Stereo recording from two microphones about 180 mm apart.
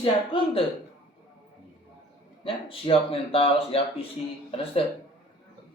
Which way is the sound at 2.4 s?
30° left (ahead or behind).